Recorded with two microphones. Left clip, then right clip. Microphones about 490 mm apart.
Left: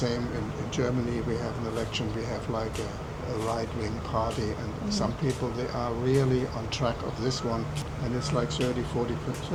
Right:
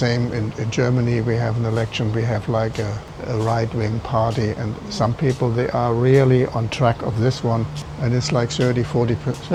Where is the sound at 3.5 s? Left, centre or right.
Right.